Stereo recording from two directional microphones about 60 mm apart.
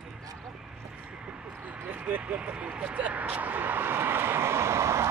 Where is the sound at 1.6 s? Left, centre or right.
Right.